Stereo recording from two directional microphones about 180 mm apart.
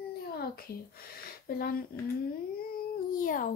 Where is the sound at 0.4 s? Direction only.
55° left (ahead or behind).